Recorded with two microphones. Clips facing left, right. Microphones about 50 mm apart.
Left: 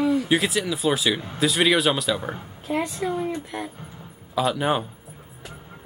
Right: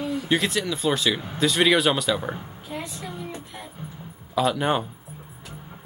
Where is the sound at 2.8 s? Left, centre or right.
Left.